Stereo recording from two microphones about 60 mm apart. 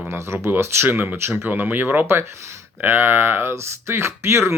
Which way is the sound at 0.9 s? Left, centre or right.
Right.